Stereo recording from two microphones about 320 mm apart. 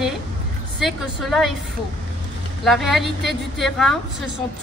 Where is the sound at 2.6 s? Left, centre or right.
Centre.